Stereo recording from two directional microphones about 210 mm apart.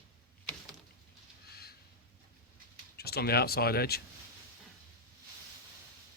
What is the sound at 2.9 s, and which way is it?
Speech, 50° left (ahead or behind).